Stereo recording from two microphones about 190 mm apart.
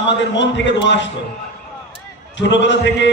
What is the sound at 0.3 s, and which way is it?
Speech, 70° left (ahead or behind).